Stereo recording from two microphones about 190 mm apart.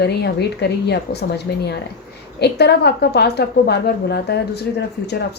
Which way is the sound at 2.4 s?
60° left (ahead or behind).